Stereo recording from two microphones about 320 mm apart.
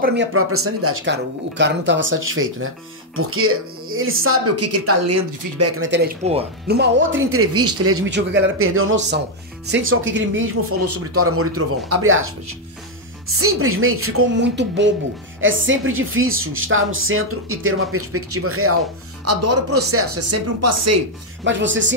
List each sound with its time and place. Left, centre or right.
0.0 s speech: right
5.6 s speech: right
13.4 s speech: right
21.5 s speech: right